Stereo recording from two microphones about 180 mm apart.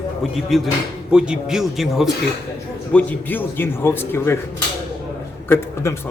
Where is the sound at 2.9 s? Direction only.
10° left (ahead or behind).